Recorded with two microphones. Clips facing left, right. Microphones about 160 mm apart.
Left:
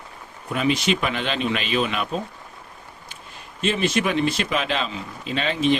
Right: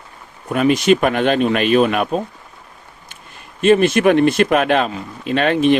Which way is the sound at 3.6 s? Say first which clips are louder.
Right 10 dB; 55° right (ahead or behind).